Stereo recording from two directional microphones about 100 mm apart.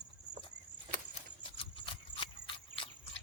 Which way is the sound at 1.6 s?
60° left (ahead or behind).